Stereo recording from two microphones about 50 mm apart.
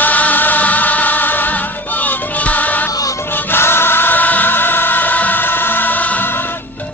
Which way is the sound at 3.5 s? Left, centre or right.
Left.